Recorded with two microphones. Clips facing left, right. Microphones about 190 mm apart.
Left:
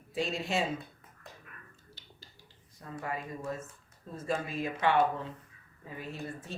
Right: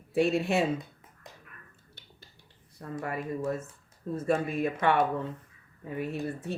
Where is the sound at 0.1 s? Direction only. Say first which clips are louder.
Right 7 dB; 60° right (ahead or behind).